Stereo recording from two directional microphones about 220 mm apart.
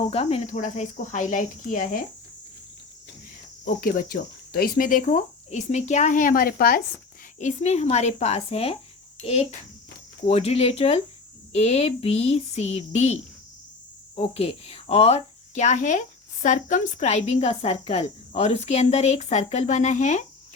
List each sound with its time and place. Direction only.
0.0 s speech: 30° left (ahead or behind)
3.8 s speech: 40° left (ahead or behind)
7.3 s speech: 30° left (ahead or behind)
14.2 s speech: 25° left (ahead or behind)